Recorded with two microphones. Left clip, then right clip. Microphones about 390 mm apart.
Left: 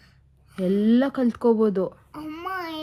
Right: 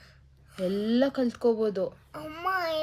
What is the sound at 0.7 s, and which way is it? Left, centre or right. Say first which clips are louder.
A woman's voice: left 5 dB; centre.